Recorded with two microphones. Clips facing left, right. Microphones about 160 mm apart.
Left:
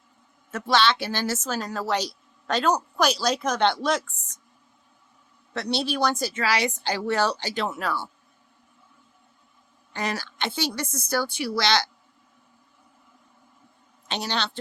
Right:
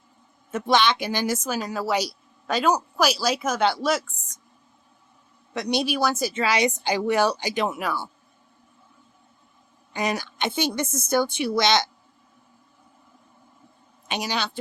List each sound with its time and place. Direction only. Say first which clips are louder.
0.5 s speech: right 1 dB; 20° right (ahead or behind)
5.5 s speech: right 2 dB; 15° right (ahead or behind)
6.3 s speech: right 3 dB; 20° right (ahead or behind)
9.9 s a woman's voice: right 3 dB; 15° right (ahead or behind)
14.1 s speech: right 1 dB; 10° right (ahead or behind)